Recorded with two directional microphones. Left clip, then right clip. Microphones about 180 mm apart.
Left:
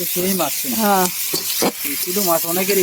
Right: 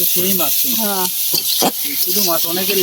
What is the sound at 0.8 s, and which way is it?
Speech, 45° left (ahead or behind).